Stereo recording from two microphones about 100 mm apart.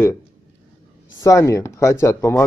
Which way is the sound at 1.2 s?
30° left (ahead or behind).